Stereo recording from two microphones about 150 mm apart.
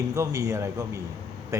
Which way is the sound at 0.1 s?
20° right (ahead or behind).